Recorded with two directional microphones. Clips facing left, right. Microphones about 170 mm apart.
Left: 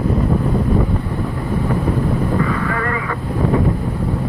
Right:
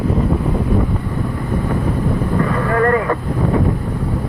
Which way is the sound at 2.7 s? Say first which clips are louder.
Right 7 dB; 50° right (ahead or behind).